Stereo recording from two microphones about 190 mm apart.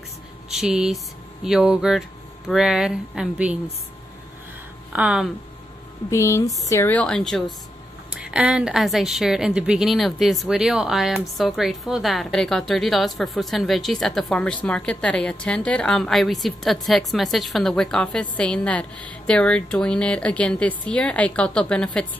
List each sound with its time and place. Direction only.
0.5 s speech: 5° right (ahead or behind)
4.9 s a woman's voice: 5° right (ahead or behind)
6.0 s a woman's voice: 15° left (ahead or behind)